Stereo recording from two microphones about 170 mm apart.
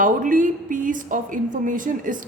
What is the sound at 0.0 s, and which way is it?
A woman's voice, 50° right (ahead or behind).